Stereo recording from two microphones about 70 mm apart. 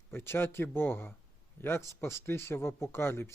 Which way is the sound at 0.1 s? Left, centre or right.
Left.